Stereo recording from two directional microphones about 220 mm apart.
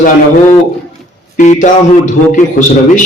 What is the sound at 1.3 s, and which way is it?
Speech, 35° left (ahead or behind).